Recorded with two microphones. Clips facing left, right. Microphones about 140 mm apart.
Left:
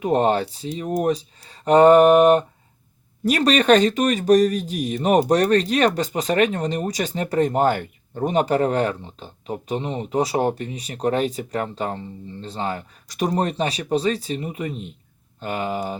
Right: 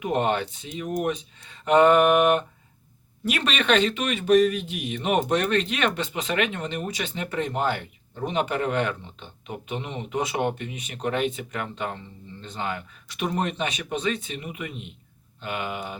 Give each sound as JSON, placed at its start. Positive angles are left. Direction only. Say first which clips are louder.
{"t": 0.0, "sound": "speech", "louder": "left 5 dB", "side_deg": 35}